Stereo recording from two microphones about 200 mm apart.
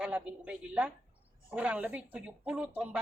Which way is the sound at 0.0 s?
5° right (ahead or behind).